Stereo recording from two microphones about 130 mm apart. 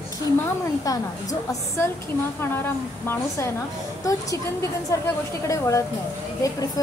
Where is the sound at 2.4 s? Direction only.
15° left (ahead or behind).